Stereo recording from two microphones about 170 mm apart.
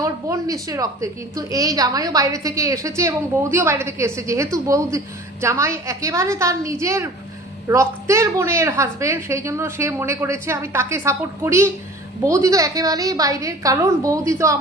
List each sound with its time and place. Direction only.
0.0 s a woman's voice: 20° right (ahead or behind)